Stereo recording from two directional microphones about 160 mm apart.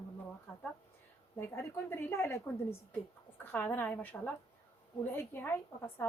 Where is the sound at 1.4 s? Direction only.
15° left (ahead or behind).